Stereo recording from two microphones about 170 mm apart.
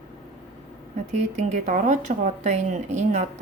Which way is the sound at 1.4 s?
40° right (ahead or behind).